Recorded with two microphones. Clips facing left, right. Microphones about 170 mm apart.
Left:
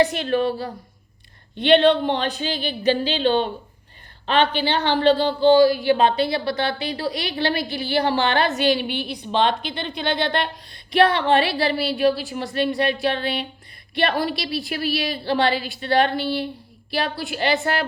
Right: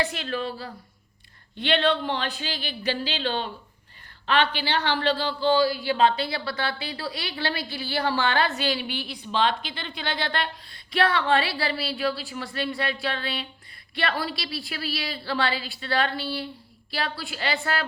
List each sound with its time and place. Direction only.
0.0 s a woman's voice: 20° left (ahead or behind)
1.5 s a woman's voice: 20° left (ahead or behind)
4.5 s a woman's voice: 20° left (ahead or behind)
5.5 s speech: 45° left (ahead or behind)
5.8 s a woman's voice: 20° left (ahead or behind)